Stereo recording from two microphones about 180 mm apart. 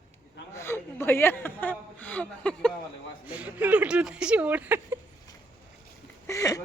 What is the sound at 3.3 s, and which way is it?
Speech, 5° right (ahead or behind).